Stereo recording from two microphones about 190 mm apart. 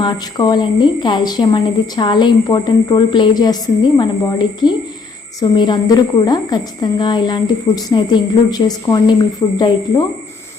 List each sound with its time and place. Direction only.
0.0 s a woman's voice: 20° left (ahead or behind)